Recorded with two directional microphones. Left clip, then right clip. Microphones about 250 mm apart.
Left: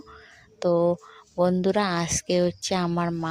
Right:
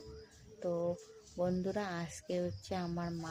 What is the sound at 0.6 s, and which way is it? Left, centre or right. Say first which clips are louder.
Speech: left 15 dB; left.